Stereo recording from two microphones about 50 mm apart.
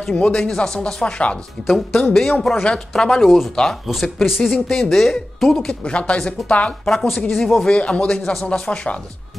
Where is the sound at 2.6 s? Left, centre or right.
Centre.